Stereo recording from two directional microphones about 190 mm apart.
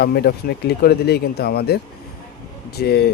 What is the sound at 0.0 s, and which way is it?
A man's voice, 55° left (ahead or behind).